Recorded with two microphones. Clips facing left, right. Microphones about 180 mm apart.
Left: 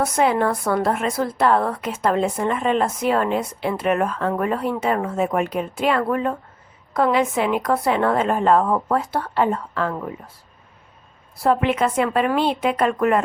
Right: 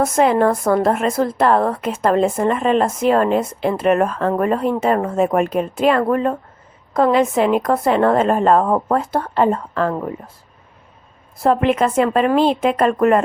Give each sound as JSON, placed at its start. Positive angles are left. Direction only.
{"t": 0.0, "sound": "a woman's voice", "side_deg": -45}
{"t": 11.4, "sound": "a woman's voice", "side_deg": -45}